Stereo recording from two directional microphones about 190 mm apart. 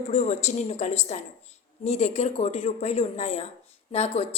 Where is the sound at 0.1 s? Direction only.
35° left (ahead or behind).